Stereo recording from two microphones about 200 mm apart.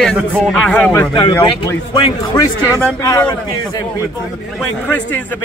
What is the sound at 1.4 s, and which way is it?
A man's voice, 25° left (ahead or behind).